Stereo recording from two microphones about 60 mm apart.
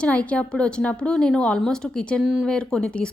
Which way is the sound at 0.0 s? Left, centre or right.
Left.